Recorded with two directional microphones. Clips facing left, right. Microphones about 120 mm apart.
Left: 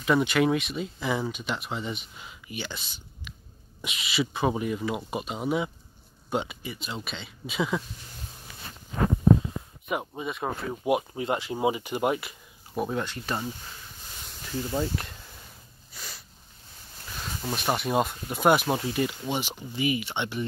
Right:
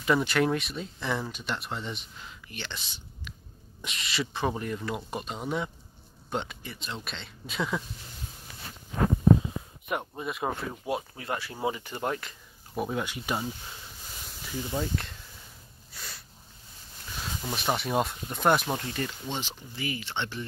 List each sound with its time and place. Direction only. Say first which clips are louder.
0.0 s speech: left 2 dB; centre (ahead or behind)
9.8 s speech: left 2 dB; centre (ahead or behind)
10.7 s speech: left 6 dB; 15° left (ahead or behind)
12.7 s speech: left 2 dB; centre (ahead or behind)
15.9 s snort: left 1 dB; centre (ahead or behind)
17.6 s speech: left 2 dB; centre (ahead or behind)